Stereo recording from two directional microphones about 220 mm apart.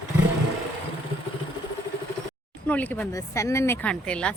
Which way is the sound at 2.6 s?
5° left (ahead or behind).